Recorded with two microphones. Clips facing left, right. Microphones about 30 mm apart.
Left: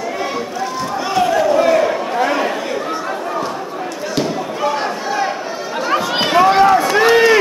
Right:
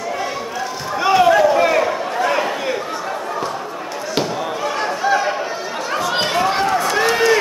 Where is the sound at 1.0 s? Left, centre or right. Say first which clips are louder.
Right 4 dB; centre.